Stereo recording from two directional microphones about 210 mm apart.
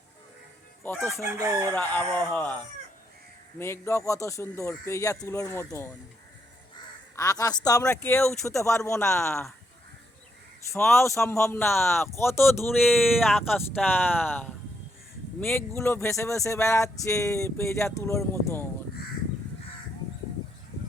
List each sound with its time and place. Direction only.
0.8 s chicken: 10° left (ahead or behind)
1.2 s chicken: 15° right (ahead or behind)
1.7 s speech: 10° left (ahead or behind)
7.2 s speech: 15° left (ahead or behind)
10.9 s speech: 15° left (ahead or behind)
12.8 s speech: centre (ahead or behind)
15.4 s speech: 10° left (ahead or behind)